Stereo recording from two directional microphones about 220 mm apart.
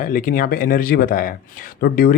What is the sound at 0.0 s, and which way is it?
Speech, 40° left (ahead or behind).